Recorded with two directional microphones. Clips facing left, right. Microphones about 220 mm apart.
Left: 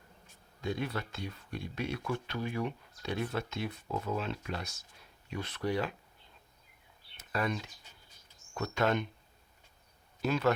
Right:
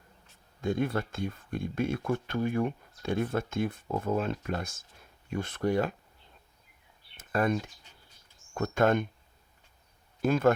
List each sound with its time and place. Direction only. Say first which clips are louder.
0.6 s speech: right 6 dB; 50° right (ahead or behind)
7.2 s speech: right 6 dB; 50° right (ahead or behind)
10.2 s speech: right 5 dB; 50° right (ahead or behind)